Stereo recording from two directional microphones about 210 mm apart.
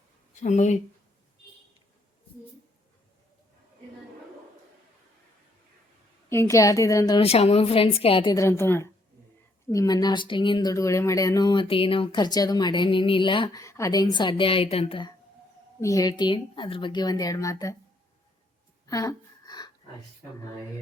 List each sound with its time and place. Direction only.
0.4 s speech: 35° left (ahead or behind)
6.2 s a woman's voice: 10° left (ahead or behind)
18.9 s a sound: 15° left (ahead or behind)